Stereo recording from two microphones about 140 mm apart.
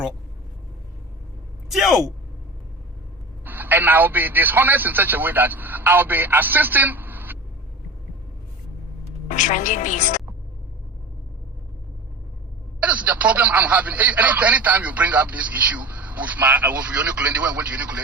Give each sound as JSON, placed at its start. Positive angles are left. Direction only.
{"t": 1.7, "sound": "speech", "side_deg": 0}
{"t": 3.4, "sound": "a man's voice", "side_deg": -15}
{"t": 9.3, "sound": "a woman's voice", "side_deg": 65}
{"t": 12.8, "sound": "speech", "side_deg": -10}